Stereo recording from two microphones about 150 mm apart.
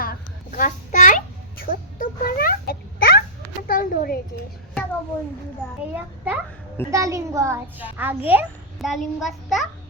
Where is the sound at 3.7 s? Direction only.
70° left (ahead or behind).